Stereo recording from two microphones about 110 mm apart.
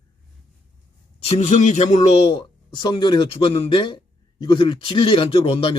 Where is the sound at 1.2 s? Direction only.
75° left (ahead or behind).